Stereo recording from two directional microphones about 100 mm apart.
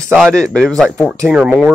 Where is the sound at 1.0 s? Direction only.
10° right (ahead or behind).